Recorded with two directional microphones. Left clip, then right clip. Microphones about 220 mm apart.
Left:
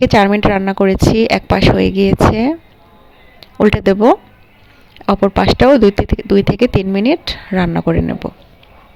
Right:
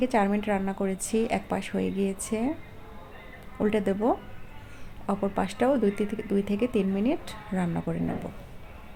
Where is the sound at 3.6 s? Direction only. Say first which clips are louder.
Left 15 dB; 45° left (ahead or behind).